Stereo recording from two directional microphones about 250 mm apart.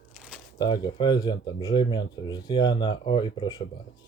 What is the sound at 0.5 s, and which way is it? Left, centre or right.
Speech, centre.